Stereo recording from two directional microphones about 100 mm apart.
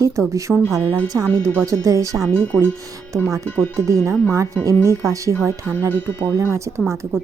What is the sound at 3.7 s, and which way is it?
A woman's voice, 30° right (ahead or behind).